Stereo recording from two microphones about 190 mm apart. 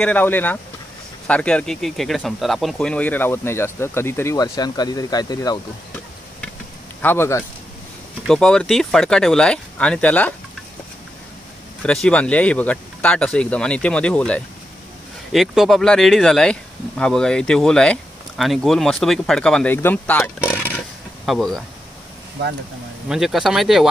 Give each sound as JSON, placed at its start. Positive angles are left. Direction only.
{"t": 0.0, "sound": "speech", "side_deg": 10}
{"t": 7.0, "sound": "speech", "side_deg": 10}
{"t": 11.8, "sound": "speech", "side_deg": 5}
{"t": 23.0, "sound": "speech", "side_deg": 0}